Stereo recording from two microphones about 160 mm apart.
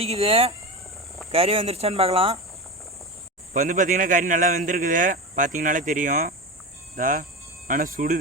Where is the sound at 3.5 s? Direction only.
55° right (ahead or behind).